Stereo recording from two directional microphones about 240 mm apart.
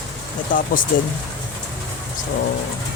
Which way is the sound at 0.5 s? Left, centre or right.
Left.